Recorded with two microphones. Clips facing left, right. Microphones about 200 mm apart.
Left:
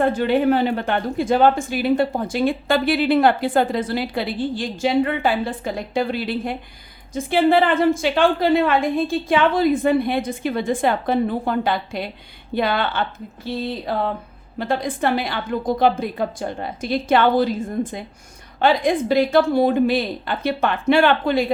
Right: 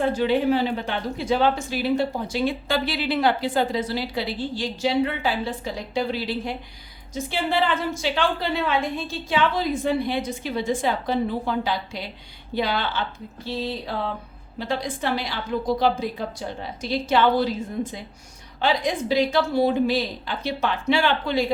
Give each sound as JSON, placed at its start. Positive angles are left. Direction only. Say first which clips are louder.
{"t": 0.0, "sound": "a woman's voice", "louder": "left 3 dB", "side_deg": 55}